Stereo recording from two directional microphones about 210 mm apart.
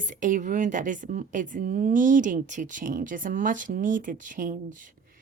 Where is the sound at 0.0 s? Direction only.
40° right (ahead or behind).